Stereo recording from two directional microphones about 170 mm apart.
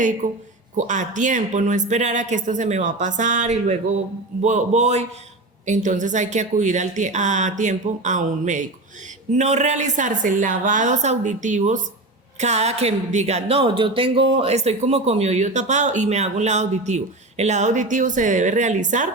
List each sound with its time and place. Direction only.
0.2 s a man's voice: 45° right (ahead or behind)